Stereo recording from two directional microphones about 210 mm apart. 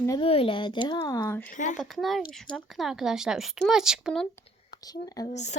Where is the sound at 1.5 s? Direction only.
35° left (ahead or behind).